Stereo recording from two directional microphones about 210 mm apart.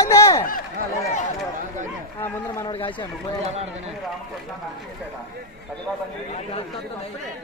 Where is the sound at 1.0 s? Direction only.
35° left (ahead or behind).